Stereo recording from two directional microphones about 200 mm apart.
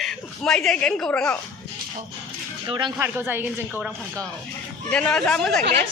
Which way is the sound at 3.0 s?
10° right (ahead or behind).